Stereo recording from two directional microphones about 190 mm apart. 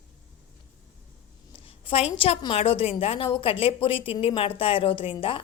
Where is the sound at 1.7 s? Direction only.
30° left (ahead or behind).